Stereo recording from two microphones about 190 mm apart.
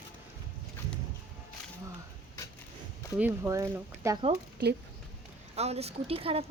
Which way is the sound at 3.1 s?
10° right (ahead or behind).